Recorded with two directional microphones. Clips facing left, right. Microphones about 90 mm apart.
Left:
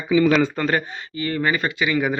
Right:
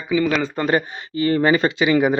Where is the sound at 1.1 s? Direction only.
25° right (ahead or behind).